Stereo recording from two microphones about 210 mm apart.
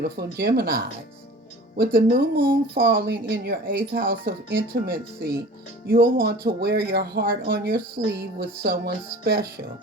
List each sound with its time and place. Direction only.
0.2 s speech: 45° right (ahead or behind)